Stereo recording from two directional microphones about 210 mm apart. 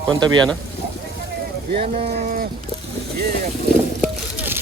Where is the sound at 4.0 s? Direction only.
10° right (ahead or behind).